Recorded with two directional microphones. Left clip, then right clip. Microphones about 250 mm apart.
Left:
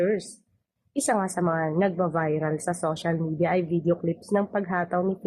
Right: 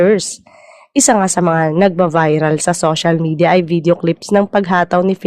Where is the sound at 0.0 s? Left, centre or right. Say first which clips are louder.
Right 13 dB; right.